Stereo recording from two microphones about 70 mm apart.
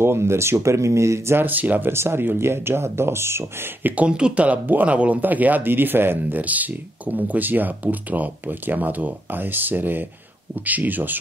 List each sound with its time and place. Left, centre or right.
0.0 s speech: right
1.9 s speech: right
3.9 s speech: centre